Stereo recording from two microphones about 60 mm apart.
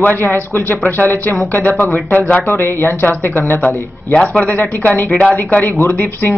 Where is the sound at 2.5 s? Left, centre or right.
Left.